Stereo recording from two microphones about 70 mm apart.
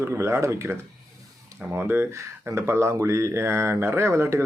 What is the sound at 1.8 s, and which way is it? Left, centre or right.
Speech, right.